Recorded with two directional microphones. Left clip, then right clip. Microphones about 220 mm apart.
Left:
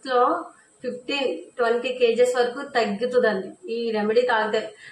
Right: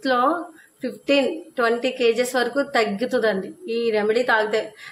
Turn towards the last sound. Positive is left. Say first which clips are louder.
# right 1 dB
turn(degrees=-50)  # may be behind; listen again after turning